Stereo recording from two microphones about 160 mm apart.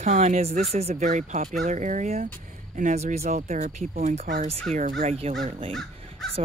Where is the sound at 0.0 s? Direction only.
45° right (ahead or behind).